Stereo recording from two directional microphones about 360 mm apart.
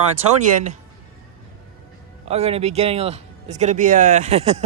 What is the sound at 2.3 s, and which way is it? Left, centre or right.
A man's voice, centre.